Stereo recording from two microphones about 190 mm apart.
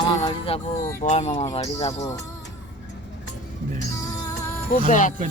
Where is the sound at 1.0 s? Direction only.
35° left (ahead or behind).